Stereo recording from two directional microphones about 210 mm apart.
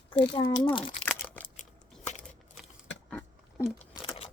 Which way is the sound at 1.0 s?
5° left (ahead or behind).